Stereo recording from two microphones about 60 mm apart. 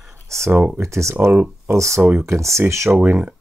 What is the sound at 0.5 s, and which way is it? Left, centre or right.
Speech, right.